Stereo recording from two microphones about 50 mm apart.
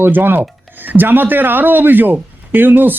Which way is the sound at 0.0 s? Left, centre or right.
Right.